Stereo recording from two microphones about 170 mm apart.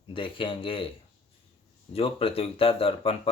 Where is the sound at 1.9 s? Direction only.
35° left (ahead or behind).